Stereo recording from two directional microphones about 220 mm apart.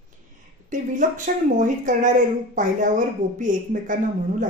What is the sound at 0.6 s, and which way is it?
Speech, 35° right (ahead or behind).